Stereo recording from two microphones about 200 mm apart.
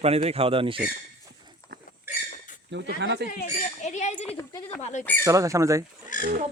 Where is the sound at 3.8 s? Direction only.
35° left (ahead or behind).